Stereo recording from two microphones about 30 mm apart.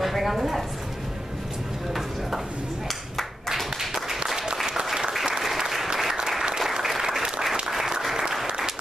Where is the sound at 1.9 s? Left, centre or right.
Centre.